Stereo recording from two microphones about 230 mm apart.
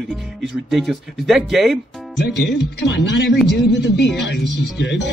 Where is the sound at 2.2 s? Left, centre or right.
Left.